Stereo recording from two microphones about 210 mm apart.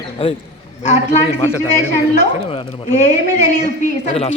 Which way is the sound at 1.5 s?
15° left (ahead or behind).